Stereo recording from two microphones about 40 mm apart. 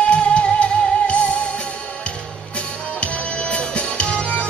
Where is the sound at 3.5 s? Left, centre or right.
Left.